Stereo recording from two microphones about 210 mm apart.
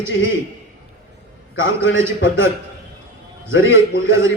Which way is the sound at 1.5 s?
60° left (ahead or behind).